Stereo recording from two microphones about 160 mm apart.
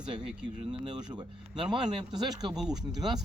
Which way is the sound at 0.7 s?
30° right (ahead or behind).